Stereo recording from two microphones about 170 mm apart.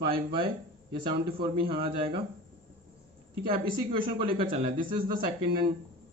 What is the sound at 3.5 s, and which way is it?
A man's voice, 30° right (ahead or behind).